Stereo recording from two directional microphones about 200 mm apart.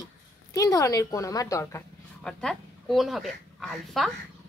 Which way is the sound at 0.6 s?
15° left (ahead or behind).